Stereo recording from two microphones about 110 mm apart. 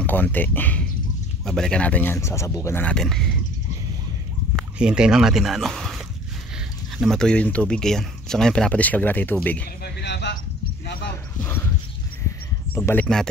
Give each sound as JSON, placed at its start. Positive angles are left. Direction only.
{"t": 0.0, "sound": "speech", "side_deg": 15}
{"t": 1.4, "sound": "speech", "side_deg": 5}
{"t": 2.1, "sound": "speech", "side_deg": 25}
{"t": 2.8, "sound": "speech", "side_deg": 5}
{"t": 4.7, "sound": "speech", "side_deg": -10}
{"t": 12.7, "sound": "speech", "side_deg": 15}